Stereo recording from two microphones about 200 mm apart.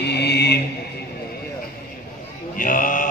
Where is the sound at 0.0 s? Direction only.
55° left (ahead or behind).